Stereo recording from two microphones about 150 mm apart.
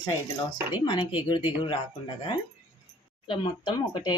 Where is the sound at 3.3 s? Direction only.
35° left (ahead or behind).